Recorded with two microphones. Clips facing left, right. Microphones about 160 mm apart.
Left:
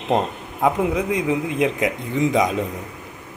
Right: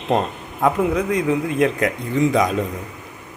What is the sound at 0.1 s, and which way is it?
A man's voice, 15° left (ahead or behind).